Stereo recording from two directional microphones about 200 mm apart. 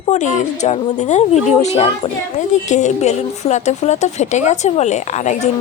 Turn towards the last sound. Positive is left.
turn(degrees=35)  # may be behind; listen again after turning